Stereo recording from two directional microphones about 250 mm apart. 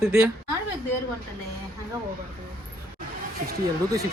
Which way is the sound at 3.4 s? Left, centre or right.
Right.